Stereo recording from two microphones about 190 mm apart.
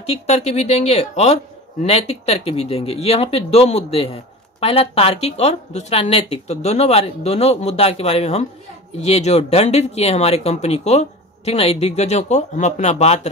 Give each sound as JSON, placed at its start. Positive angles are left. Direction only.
{"t": 0.0, "sound": "speech", "side_deg": 35}